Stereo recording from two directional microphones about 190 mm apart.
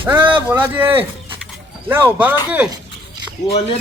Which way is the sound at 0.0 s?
10° right (ahead or behind).